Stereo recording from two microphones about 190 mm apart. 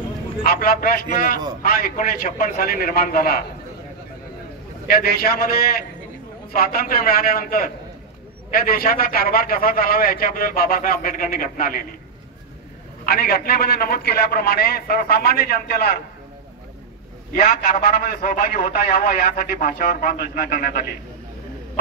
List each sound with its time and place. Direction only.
0.4 s a man's voice: 50° left (ahead or behind)
4.8 s a man's voice: 55° left (ahead or behind)
13.0 s a man's voice: 55° left (ahead or behind)
17.3 s a man's voice: 45° left (ahead or behind)